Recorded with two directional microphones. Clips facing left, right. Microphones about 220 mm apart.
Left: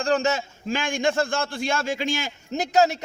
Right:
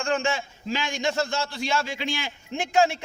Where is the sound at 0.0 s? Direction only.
40° left (ahead or behind).